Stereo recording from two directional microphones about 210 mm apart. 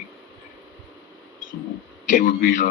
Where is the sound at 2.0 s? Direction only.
40° left (ahead or behind).